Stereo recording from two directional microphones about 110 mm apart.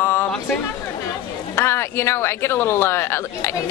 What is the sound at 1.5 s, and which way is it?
A woman's voice, 25° left (ahead or behind).